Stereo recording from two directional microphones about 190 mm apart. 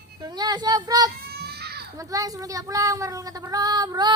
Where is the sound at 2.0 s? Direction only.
20° right (ahead or behind).